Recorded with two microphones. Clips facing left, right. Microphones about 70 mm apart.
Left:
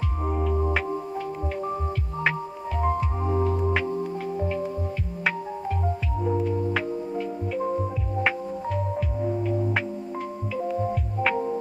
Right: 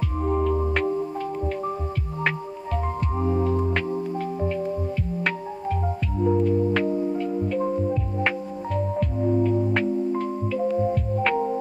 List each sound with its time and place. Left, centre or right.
0.3 s music: centre
2.8 s music: centre
6.2 s music: centre
9.2 s music: centre